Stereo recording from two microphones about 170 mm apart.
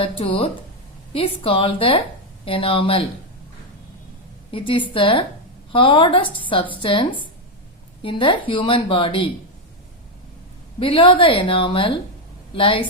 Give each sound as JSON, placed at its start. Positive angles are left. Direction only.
{"t": 0.0, "sound": "a woman's voice", "side_deg": 35}
{"t": 4.5, "sound": "a woman's voice", "side_deg": 30}
{"t": 10.8, "sound": "a woman's voice", "side_deg": 30}